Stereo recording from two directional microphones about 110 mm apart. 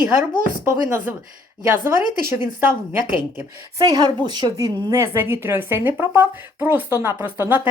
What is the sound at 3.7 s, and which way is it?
Speech, 35° right (ahead or behind).